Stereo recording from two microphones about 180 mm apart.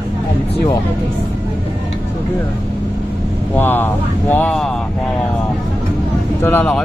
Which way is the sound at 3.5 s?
10° left (ahead or behind).